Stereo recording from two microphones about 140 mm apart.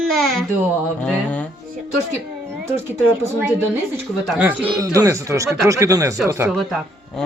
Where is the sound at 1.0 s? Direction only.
10° left (ahead or behind).